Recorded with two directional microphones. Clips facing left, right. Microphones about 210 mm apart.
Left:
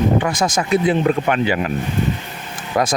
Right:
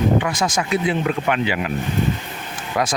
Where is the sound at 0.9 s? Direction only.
40° left (ahead or behind).